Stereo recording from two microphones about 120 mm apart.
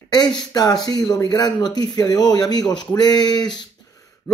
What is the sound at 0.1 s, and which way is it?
A man's voice, 35° left (ahead or behind).